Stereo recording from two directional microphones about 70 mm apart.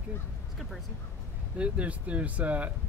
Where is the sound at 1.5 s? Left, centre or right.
Centre.